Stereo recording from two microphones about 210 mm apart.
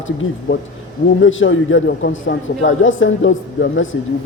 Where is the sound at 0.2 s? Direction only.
65° left (ahead or behind).